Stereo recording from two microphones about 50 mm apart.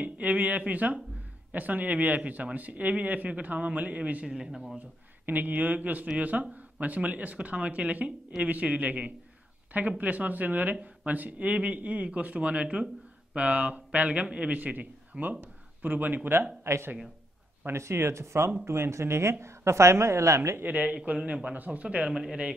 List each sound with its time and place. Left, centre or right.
0.0 s speech: right
4.3 s speech: centre
4.7 s speech: right
15.4 s a sound: right
16.6 s a woman's voice: right
20.6 s speech: right
22.1 s speech: centre